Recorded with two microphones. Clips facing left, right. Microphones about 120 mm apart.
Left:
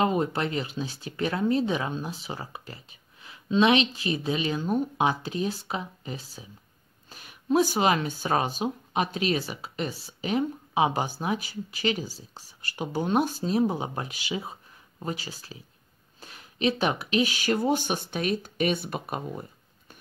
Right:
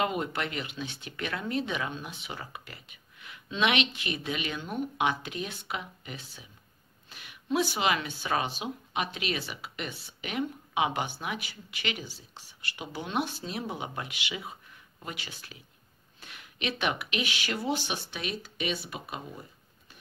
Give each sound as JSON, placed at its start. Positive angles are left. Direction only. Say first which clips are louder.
{"t": 0.0, "sound": "speech", "louder": "left 5 dB", "side_deg": 35}